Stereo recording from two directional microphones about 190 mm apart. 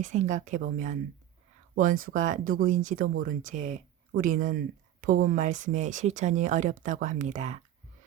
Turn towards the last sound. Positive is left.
turn(degrees=-40)  # may be behind; listen again after turning